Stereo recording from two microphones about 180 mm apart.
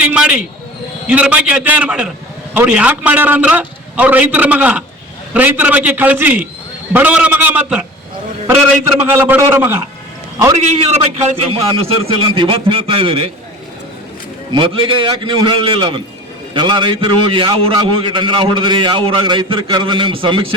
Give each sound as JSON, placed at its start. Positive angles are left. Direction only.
{"t": 0.0, "sound": "a sound", "side_deg": -5}
{"t": 1.0, "sound": "a man's voice", "side_deg": -5}
{"t": 9.0, "sound": "a man's voice", "side_deg": -10}
{"t": 11.2, "sound": "a man's voice", "side_deg": -30}
{"t": 14.5, "sound": "a man's voice", "side_deg": -25}